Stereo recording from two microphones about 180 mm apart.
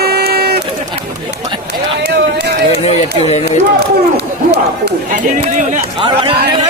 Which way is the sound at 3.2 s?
35° left (ahead or behind).